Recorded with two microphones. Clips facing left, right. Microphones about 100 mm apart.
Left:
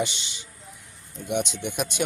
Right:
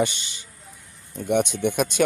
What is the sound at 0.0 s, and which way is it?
Speech, 50° right (ahead or behind).